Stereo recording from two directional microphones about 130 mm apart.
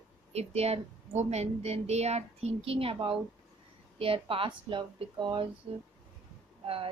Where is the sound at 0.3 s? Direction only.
55° right (ahead or behind).